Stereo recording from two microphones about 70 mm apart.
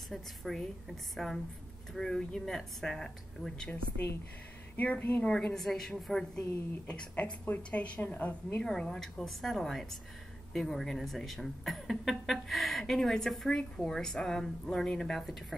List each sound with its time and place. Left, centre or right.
0.1 s speech: centre
4.7 s a woman's voice: left
5.2 s speech: centre
6.9 s a woman's voice: centre
8.6 s speech: centre